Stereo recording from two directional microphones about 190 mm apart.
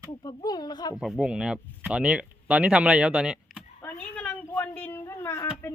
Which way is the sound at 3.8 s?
10° left (ahead or behind).